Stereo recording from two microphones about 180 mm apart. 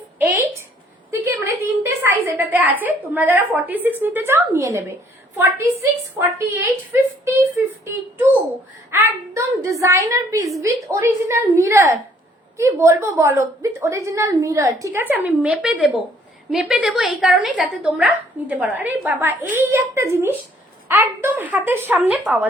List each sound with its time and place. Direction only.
1.1 s a sound: 15° right (ahead or behind)
2.2 s speech: 15° right (ahead or behind)
6.1 s speech: 15° right (ahead or behind)